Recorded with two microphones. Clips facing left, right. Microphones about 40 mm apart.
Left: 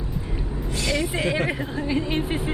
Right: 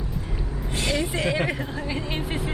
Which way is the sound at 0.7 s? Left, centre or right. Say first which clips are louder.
Even; right.